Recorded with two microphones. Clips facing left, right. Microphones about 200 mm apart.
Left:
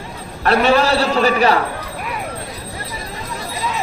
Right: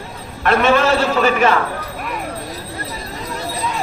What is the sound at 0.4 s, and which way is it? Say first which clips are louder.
A man's voice: even; 35° left (ahead or behind).